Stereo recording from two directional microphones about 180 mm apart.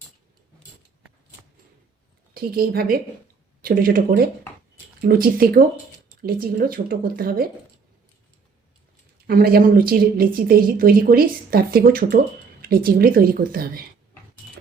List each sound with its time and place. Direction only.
2.3 s a woman's voice: 55° right (ahead or behind)
9.2 s a woman's voice: 55° right (ahead or behind)